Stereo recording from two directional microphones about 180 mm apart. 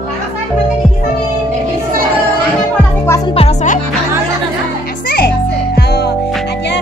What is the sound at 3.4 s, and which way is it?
Music, 40° left (ahead or behind).